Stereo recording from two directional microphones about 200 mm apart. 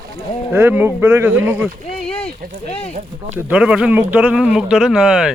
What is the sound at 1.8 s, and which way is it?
Speech, 30° left (ahead or behind).